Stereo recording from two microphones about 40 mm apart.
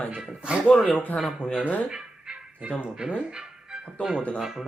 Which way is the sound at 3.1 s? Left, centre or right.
Right.